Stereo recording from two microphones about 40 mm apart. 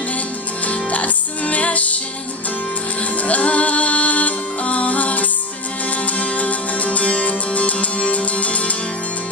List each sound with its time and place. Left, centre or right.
0.7 s music: left
3.2 s music: left